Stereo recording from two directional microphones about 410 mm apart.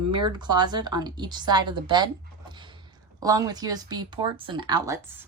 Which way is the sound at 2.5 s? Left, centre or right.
Centre.